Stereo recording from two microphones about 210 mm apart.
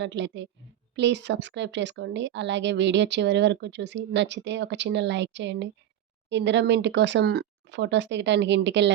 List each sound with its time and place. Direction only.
0.0 s speech: 60° right (ahead or behind)